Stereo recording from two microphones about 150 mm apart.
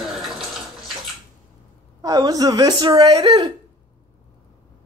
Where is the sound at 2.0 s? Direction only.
25° right (ahead or behind).